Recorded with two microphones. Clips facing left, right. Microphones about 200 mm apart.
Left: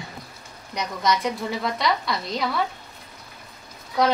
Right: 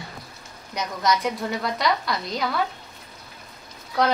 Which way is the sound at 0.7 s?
Centre (ahead or behind).